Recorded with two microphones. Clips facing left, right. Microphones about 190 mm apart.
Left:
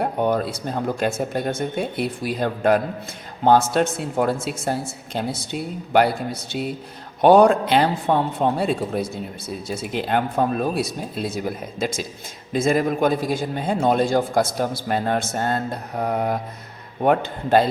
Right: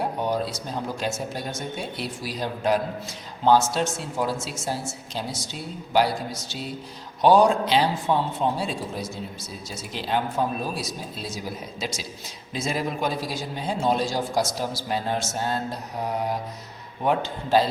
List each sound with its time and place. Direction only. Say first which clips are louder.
0.0 s a man's voice: left 5 dB; 55° left (ahead or behind)